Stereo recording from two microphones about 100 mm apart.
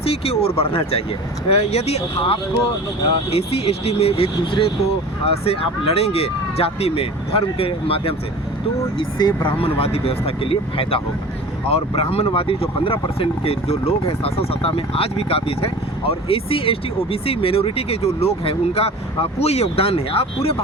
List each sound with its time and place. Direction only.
0.0 s speech: 75° left (ahead or behind)
1.5 s speech: 90° left; by 8.1 s 70° left (ahead or behind)
9.0 s speech: 50° left (ahead or behind); by 11.0 s 65° left (ahead or behind)
11.7 s speech: 75° left (ahead or behind)